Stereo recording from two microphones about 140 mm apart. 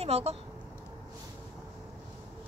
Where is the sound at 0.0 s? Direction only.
50° right (ahead or behind).